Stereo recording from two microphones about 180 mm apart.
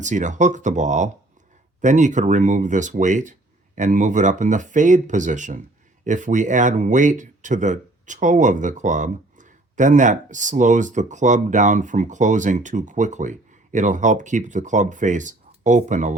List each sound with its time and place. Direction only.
0.0 s speech: 45° right (ahead or behind)